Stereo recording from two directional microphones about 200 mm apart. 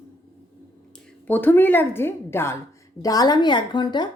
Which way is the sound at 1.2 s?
10° left (ahead or behind).